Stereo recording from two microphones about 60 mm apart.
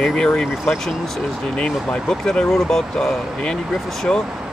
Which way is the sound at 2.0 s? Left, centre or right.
Centre.